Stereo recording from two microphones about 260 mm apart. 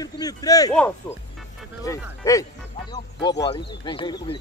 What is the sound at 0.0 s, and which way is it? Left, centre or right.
Speech, centre.